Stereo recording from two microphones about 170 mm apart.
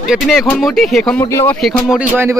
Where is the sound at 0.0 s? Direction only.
Centre (ahead or behind).